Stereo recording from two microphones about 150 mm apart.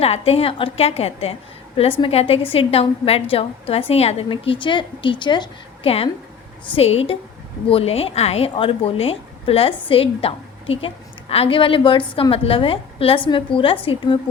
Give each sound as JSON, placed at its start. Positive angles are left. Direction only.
{"t": 0.0, "sound": "a woman's voice", "side_deg": 40}